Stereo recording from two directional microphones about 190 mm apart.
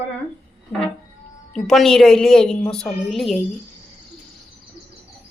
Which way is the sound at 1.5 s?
Centre (ahead or behind).